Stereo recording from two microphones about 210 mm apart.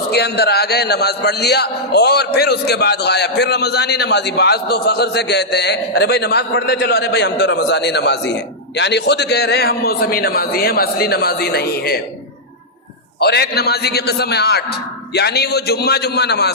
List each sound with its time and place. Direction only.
0.1 s a man's voice: 50° left (ahead or behind)
13.1 s a man's voice: 50° left (ahead or behind)